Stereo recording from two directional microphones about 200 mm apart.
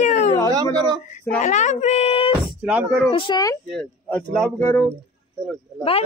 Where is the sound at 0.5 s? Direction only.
20° right (ahead or behind).